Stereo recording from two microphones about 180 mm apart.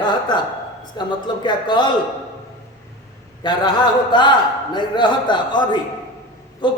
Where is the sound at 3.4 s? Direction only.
25° left (ahead or behind).